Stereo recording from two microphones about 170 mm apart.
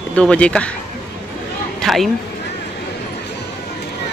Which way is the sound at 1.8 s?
Centre (ahead or behind).